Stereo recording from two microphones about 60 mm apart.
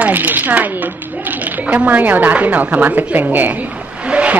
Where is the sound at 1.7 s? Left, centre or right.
Right.